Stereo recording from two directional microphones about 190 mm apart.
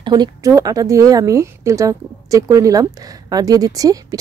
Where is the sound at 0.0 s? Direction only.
20° right (ahead or behind).